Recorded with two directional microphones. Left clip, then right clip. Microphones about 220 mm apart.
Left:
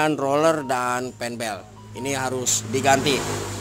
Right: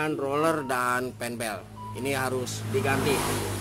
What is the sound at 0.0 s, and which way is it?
Speech, 25° left (ahead or behind).